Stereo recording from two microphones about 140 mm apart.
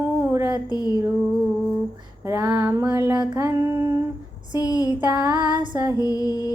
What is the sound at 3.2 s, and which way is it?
Child singing, 30° right (ahead or behind).